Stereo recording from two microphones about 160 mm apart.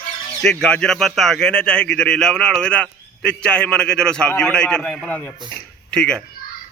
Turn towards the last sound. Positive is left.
turn(degrees=5)  # may be behind; listen again after turning